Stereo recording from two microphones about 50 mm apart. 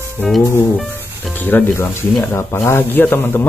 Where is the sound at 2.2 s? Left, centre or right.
Left.